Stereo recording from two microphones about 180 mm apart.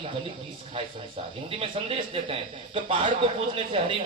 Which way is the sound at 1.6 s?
30° right (ahead or behind).